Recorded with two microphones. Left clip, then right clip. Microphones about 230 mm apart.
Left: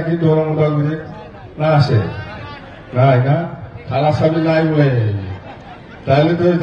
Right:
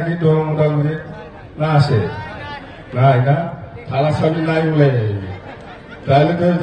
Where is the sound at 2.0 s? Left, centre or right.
Right.